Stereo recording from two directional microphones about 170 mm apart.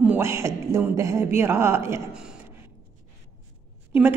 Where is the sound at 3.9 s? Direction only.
10° right (ahead or behind).